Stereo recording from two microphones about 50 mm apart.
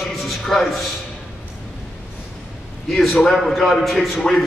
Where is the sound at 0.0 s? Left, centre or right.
Centre.